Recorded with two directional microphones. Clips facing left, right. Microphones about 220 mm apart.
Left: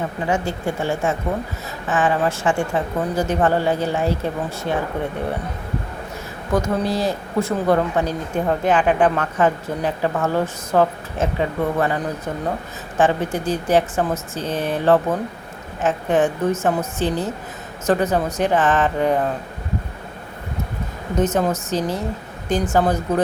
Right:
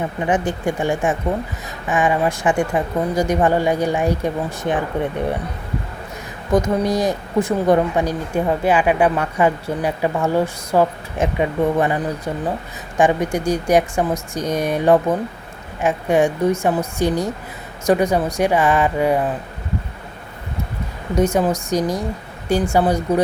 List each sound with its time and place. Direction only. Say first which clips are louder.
0.3 s a woman's voice: right 3 dB; 20° right (ahead or behind)
6.5 s a woman's voice: right 3 dB; 15° right (ahead or behind)
21.2 s a woman's voice: right 2 dB; 10° right (ahead or behind)